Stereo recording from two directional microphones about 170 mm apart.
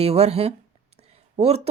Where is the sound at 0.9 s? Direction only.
40° right (ahead or behind).